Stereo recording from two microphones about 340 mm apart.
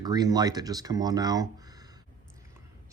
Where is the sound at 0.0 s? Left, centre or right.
Centre.